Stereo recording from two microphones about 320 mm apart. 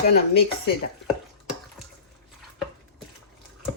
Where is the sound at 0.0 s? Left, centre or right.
Left.